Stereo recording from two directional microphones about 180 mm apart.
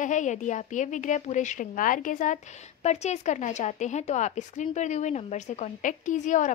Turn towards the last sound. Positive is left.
turn(degrees=45)  # may be behind; listen again after turning